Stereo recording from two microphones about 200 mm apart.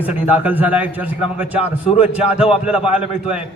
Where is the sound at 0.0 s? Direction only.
5° right (ahead or behind).